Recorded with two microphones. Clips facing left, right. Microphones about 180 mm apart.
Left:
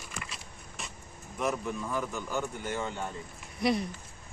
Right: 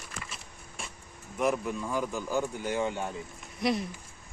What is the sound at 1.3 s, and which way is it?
Speech, 10° right (ahead or behind).